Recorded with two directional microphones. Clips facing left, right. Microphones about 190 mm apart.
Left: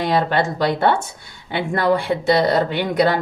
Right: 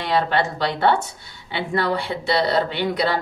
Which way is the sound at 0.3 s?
45° left (ahead or behind).